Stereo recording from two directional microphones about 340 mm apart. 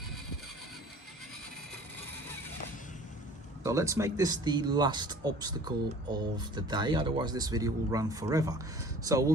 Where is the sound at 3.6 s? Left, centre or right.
Centre.